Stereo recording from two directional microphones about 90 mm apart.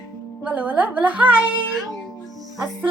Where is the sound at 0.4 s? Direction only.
15° right (ahead or behind).